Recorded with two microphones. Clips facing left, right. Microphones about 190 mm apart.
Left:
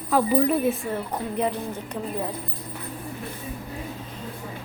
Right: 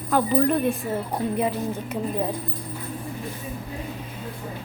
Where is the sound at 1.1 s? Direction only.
10° right (ahead or behind).